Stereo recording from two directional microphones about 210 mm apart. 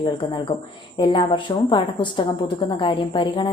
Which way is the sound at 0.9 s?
20° left (ahead or behind).